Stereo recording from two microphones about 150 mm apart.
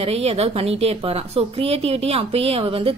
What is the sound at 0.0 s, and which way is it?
A woman's voice, 40° right (ahead or behind).